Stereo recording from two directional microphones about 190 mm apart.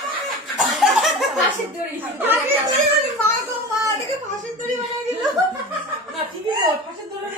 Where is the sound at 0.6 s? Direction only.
Centre (ahead or behind).